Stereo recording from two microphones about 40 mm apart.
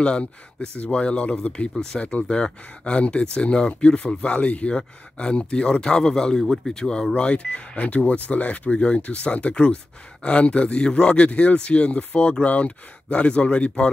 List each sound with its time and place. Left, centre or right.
0.0 s speech: left